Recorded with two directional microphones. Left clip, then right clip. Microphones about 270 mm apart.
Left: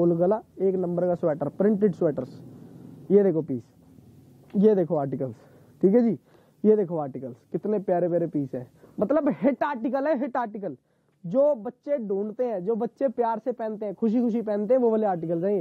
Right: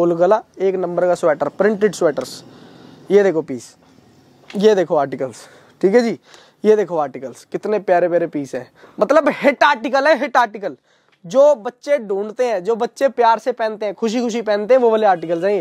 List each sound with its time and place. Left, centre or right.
0.0 s speech: centre
4.5 s speech: centre